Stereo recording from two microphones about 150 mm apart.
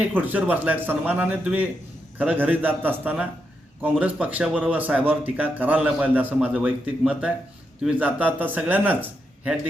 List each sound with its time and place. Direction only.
0.0 s speech: 10° right (ahead or behind)